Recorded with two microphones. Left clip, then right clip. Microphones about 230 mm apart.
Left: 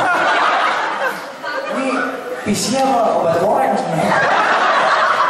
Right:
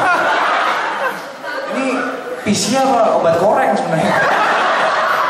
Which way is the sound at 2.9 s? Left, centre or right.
Centre.